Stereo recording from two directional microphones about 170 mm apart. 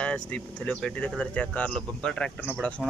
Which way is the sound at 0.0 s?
5° left (ahead or behind).